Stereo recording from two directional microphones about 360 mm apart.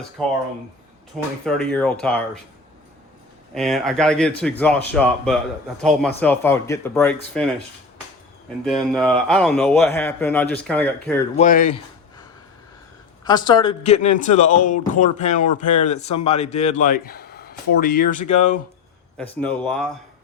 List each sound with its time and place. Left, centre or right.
0.2 s speech: centre
1.5 s speech: centre
3.5 s speech: centre
8.6 s speech: centre
11.3 s speech: left
13.2 s a man's voice: centre
19.1 s speech: centre